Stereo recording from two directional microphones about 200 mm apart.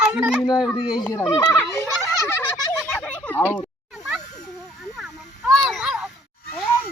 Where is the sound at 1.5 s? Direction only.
5° left (ahead or behind).